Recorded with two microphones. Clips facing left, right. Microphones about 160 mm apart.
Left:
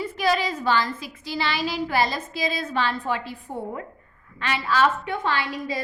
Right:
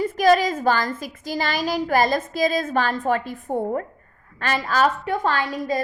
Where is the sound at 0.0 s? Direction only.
45° right (ahead or behind).